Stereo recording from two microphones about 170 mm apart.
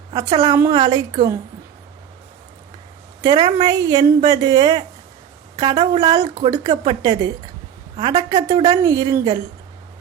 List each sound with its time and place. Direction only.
0.1 s a woman's voice: 20° right (ahead or behind)
3.2 s a woman's voice: 25° right (ahead or behind)
8.4 s a woman's voice: 25° right (ahead or behind)